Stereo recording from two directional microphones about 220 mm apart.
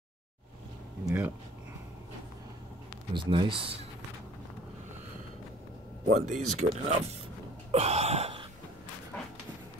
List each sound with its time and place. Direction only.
1.0 s speech: 10° right (ahead or behind)
3.2 s speech: 20° right (ahead or behind)
6.1 s speech: 30° right (ahead or behind)
7.7 s a sound: 30° right (ahead or behind)
9.1 s dog: 5° left (ahead or behind)